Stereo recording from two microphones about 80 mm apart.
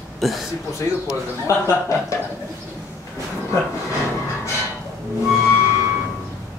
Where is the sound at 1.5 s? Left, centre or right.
Left.